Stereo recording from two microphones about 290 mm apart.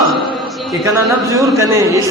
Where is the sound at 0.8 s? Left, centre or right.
Centre.